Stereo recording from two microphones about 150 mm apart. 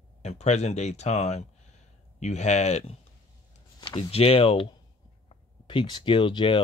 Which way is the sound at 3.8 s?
30° left (ahead or behind).